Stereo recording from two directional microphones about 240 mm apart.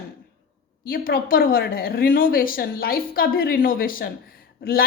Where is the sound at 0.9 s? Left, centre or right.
Left.